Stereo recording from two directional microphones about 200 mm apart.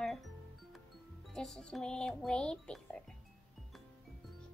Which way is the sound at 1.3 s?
Centre (ahead or behind).